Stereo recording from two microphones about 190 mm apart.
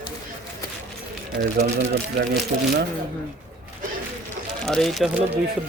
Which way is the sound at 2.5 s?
45° right (ahead or behind).